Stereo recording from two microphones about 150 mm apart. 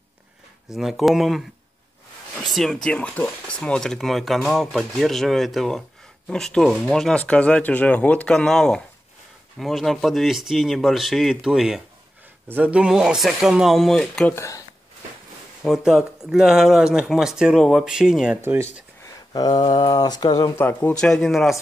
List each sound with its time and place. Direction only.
0.7 s speech: centre (ahead or behind)
2.4 s speech: centre (ahead or behind)
14.3 s speech: 20° left (ahead or behind)
15.6 s speech: centre (ahead or behind)
19.3 s speech: 25° left (ahead or behind)
20.6 s speech: 10° left (ahead or behind)